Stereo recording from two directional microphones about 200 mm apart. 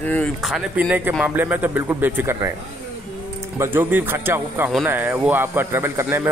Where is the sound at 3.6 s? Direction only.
10° right (ahead or behind).